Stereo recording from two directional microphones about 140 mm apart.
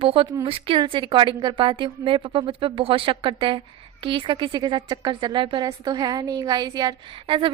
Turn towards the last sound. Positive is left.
turn(degrees=-35)  # may be behind; listen again after turning